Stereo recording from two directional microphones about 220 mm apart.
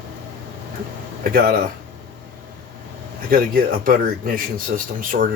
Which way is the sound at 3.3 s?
40° right (ahead or behind).